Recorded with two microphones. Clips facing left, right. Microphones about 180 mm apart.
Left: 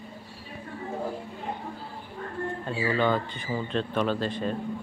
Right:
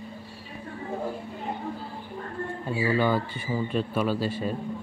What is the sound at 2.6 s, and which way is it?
A man's voice, 10° right (ahead or behind).